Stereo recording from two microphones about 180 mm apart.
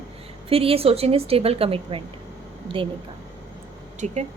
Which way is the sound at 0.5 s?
30° right (ahead or behind).